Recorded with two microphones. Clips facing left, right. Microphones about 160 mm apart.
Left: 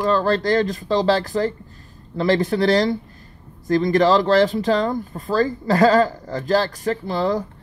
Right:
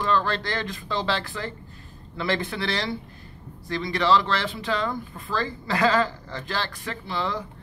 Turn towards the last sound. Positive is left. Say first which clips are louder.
# left 8 dB
turn(degrees=40)  # may be behind; listen again after turning